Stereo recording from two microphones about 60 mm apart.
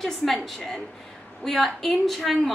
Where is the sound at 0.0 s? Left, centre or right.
Centre.